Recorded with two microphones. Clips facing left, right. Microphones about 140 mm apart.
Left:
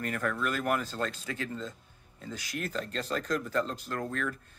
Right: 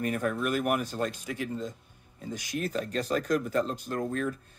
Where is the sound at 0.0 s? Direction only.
20° right (ahead or behind).